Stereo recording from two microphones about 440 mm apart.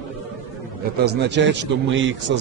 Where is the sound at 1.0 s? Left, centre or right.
Right.